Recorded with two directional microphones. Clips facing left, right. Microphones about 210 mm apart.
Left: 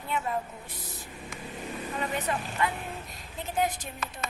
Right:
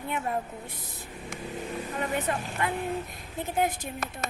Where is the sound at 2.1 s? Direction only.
50° right (ahead or behind).